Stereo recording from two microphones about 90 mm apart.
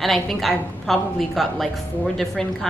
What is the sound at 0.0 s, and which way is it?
A woman's voice, centre (ahead or behind).